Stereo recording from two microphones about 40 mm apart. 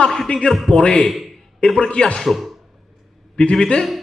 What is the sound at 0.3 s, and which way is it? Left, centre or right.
Speech, left.